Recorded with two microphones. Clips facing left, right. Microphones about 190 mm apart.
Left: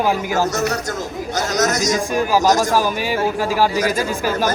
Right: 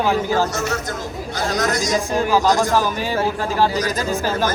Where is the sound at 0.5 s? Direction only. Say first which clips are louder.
Left 3 dB; 40° left (ahead or behind).